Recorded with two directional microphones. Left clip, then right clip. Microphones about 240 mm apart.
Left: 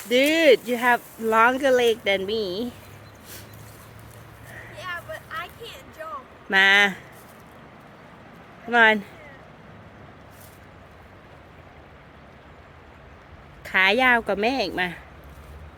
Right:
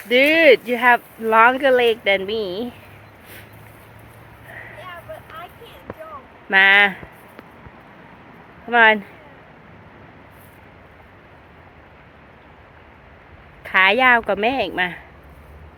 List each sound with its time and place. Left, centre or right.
0.1 s speech: centre
5.4 s a sound: left
6.5 s speech: centre
8.6 s speech: centre
13.7 s speech: centre